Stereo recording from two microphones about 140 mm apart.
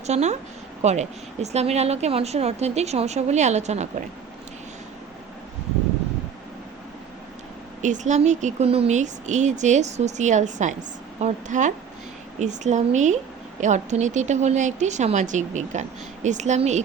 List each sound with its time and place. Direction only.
0.1 s speech: 55° right (ahead or behind)
7.8 s speech: 60° right (ahead or behind)